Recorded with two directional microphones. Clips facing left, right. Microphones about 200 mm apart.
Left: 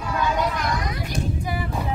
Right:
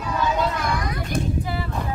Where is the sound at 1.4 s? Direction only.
15° left (ahead or behind).